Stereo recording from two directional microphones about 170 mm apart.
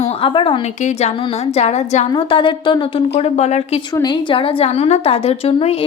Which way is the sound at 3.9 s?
25° left (ahead or behind).